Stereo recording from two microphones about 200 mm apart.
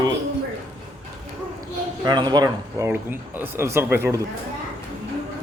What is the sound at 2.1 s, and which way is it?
Speech, 20° right (ahead or behind).